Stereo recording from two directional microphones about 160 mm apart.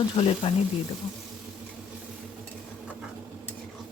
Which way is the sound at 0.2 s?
35° left (ahead or behind).